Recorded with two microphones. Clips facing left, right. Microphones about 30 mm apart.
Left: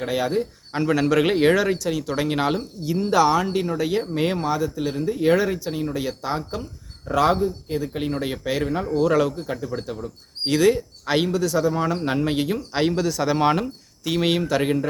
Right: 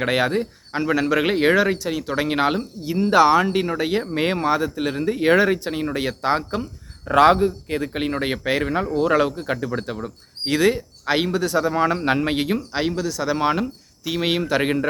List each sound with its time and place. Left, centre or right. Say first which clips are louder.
0.0 s a man's voice: right 3 dB; right
0.7 s a man's voice: even; centre; by 8.0 s right
8.0 s speech: right 3 dB; right
10.4 s speech: left 1 dB; centre
11.3 s speech: even; right
12.9 s speech: left 1 dB; centre
14.4 s speech: right 1 dB; right